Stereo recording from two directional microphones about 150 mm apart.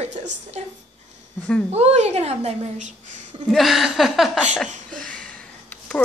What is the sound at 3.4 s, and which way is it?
Speech, centre (ahead or behind).